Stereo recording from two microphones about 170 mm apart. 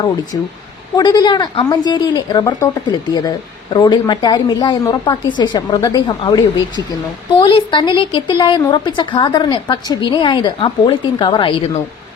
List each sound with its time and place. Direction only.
0.3 s a woman's voice: 20° left (ahead or behind)